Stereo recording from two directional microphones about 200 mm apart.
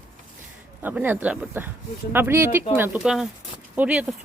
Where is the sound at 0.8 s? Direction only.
10° right (ahead or behind).